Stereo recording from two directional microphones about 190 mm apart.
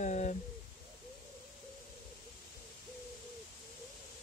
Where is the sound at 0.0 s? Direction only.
40° left (ahead or behind).